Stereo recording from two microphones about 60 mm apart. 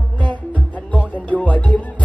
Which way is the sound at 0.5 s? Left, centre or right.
Left.